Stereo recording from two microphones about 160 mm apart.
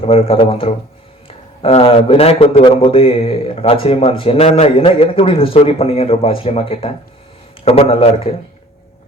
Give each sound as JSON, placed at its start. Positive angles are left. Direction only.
{"t": 0.0, "sound": "a man's voice", "side_deg": 35}